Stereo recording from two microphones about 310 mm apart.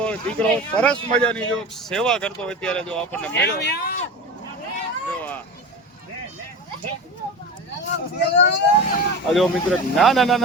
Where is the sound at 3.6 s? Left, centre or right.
Left.